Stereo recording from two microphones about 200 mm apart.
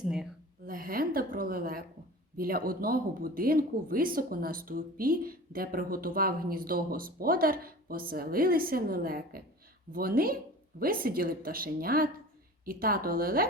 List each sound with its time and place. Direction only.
0.0 s speech: 5° right (ahead or behind)
0.6 s a woman's voice: 45° right (ahead or behind)